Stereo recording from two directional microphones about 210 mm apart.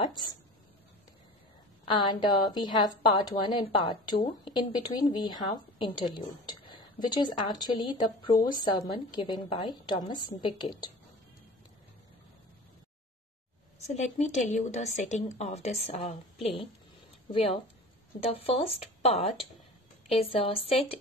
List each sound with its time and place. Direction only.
1.9 s speech: 20° left (ahead or behind)
13.8 s a woman's voice: 35° left (ahead or behind)
18.2 s speech: 30° left (ahead or behind)